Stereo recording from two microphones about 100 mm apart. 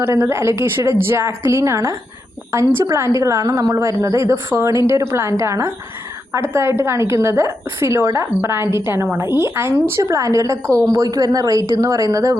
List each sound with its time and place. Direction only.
0.0 s a woman's voice: 25° right (ahead or behind)